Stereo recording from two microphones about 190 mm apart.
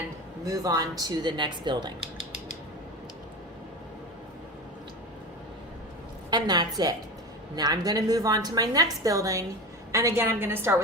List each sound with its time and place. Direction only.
0.4 s a woman's voice: 20° right (ahead or behind)
6.3 s a woman's voice: 20° right (ahead or behind)